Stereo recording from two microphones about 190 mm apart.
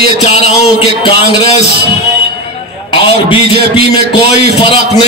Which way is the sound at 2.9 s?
25° left (ahead or behind).